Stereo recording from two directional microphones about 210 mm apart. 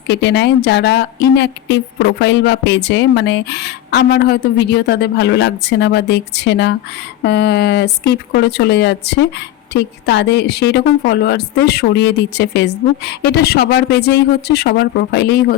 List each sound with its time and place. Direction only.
0.1 s a woman's voice: 55° left (ahead or behind)